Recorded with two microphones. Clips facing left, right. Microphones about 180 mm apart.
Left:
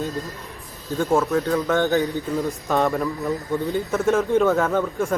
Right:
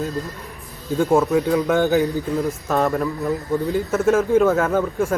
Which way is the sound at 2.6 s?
Centre (ahead or behind).